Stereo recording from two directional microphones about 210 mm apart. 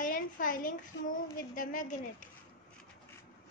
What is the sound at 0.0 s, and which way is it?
A woman's voice, 40° left (ahead or behind).